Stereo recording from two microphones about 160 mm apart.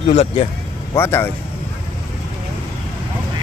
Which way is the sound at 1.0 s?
15° left (ahead or behind).